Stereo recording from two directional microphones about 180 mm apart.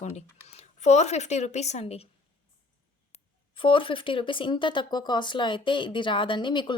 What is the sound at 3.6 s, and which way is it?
Speech, 30° left (ahead or behind).